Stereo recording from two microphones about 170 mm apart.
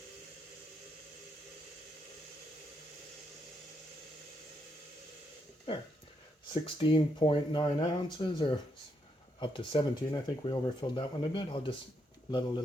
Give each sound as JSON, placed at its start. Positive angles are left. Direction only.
{"t": 6.5, "sound": "speech", "side_deg": 30}